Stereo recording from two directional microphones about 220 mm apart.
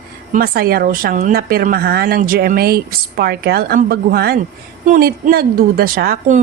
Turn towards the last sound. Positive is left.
turn(degrees=-40)  # may be behind; listen again after turning